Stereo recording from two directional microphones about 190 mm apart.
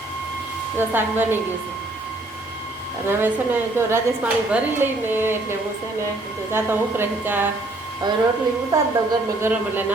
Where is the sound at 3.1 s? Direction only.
10° right (ahead or behind).